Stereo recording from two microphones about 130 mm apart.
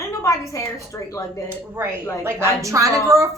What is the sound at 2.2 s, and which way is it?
A child's voice, 20° right (ahead or behind).